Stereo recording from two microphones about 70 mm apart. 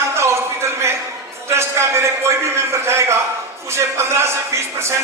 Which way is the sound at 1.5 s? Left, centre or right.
Right.